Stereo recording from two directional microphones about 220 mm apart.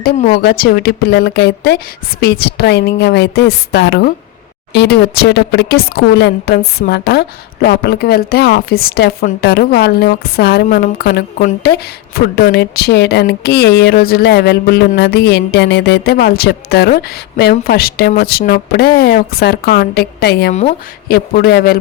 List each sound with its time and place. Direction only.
0.4 s speech: 40° left (ahead or behind)
20.5 s speech: 30° left (ahead or behind)
21.1 s speech: 45° left (ahead or behind)